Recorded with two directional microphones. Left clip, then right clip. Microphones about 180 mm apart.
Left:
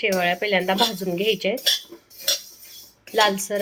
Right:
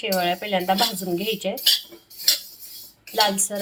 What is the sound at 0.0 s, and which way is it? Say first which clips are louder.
Speech: left 2 dB; 25° left (ahead or behind).